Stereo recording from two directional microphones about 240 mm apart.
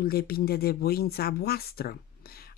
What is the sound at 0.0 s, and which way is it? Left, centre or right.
Speech, left.